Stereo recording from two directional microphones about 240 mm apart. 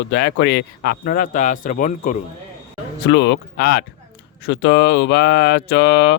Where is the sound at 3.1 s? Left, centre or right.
Left.